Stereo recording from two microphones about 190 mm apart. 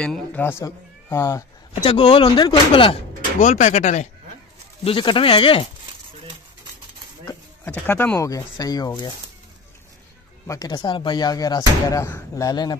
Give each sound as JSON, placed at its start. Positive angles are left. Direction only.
{"t": 0.0, "sound": "speech", "side_deg": 5}
{"t": 1.9, "sound": "speech", "side_deg": 30}
{"t": 4.8, "sound": "speech", "side_deg": 25}
{"t": 7.2, "sound": "speech", "side_deg": 10}
{"t": 10.4, "sound": "speech", "side_deg": 15}